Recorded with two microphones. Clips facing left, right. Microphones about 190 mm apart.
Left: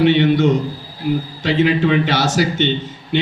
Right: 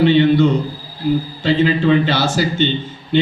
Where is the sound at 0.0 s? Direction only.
70° left (ahead or behind).